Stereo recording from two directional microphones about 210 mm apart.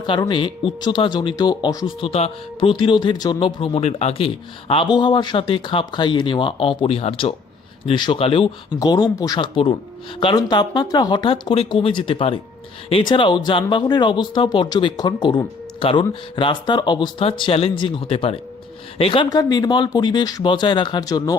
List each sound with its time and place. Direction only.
0.0 s speech: 20° left (ahead or behind)